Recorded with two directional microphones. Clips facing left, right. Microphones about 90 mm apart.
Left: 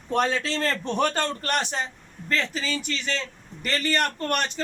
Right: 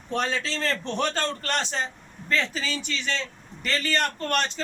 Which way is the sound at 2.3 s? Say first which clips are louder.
Even; centre (ahead or behind).